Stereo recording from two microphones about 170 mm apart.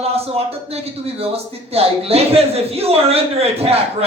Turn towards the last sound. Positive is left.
turn(degrees=-35)  # may be behind; listen again after turning